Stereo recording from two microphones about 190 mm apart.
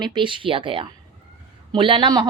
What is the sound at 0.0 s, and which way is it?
A woman's voice, 25° right (ahead or behind).